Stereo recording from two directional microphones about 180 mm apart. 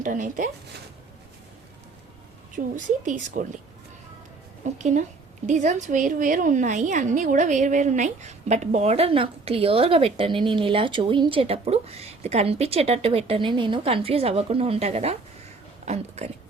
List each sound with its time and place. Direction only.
0.0 s a woman's voice: 45° right (ahead or behind)
2.7 s a woman's voice: 45° right (ahead or behind)
4.6 s a woman's voice: 40° right (ahead or behind)